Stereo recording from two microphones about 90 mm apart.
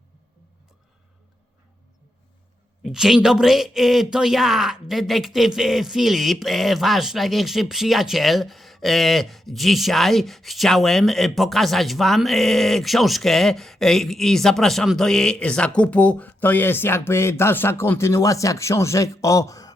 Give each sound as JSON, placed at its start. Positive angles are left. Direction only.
{"t": 2.8, "sound": "speech", "side_deg": -5}